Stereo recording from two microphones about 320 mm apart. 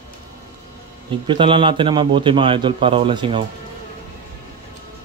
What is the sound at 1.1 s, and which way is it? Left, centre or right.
A man's voice, centre.